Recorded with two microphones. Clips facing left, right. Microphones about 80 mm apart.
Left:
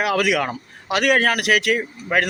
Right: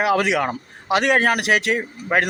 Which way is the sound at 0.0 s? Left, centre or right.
Right.